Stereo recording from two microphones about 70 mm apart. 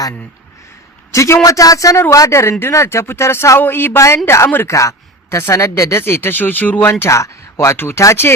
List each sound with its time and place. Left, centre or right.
1.1 s a man's voice: left
3.6 s speech: left
3.9 s a man's voice: left
6.0 s speech: left
7.0 s speech: left
7.8 s speech: left